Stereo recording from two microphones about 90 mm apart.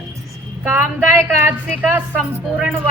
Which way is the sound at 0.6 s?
25° right (ahead or behind).